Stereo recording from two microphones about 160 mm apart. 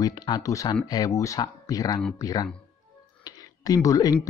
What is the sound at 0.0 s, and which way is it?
Speech, 25° left (ahead or behind).